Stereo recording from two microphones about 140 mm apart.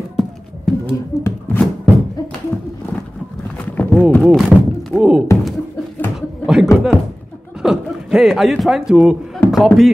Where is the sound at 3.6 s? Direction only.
15° left (ahead or behind).